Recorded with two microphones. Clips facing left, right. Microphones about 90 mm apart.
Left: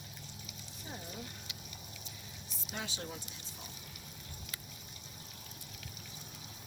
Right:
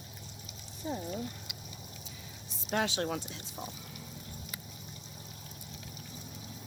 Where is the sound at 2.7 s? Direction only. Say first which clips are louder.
Right 11 dB; 75° right (ahead or behind).